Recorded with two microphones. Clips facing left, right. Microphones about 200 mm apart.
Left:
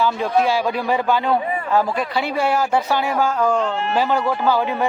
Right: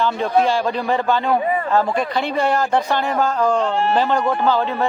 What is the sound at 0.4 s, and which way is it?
Speech, 10° left (ahead or behind).